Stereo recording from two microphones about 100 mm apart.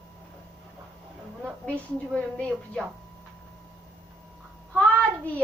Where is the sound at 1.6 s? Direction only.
10° left (ahead or behind).